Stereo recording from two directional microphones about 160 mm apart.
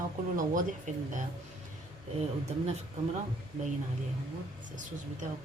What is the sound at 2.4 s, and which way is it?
Speech, 45° right (ahead or behind).